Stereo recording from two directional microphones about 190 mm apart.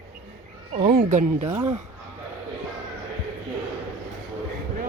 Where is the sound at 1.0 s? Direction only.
40° right (ahead or behind).